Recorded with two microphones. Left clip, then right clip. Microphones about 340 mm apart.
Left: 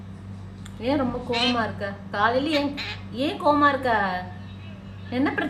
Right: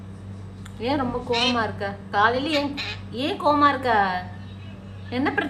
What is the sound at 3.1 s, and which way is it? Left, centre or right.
A woman's voice, right.